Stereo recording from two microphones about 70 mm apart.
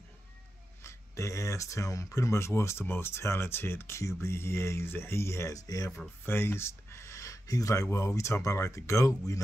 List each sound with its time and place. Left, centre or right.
0.8 s speech: left
5.6 s speech: left
6.2 s speech: left